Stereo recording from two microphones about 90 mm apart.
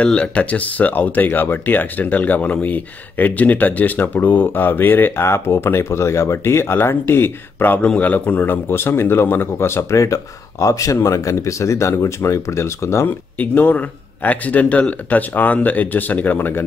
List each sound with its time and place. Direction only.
0.0 s speech: 10° left (ahead or behind); by 13.1 s 30° left (ahead or behind)
13.4 s speech: 20° left (ahead or behind)